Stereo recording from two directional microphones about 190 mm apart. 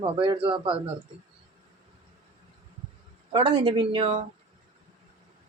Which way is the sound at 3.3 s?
25° right (ahead or behind).